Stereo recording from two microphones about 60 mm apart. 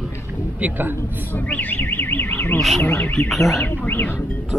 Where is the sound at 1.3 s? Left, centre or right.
Left.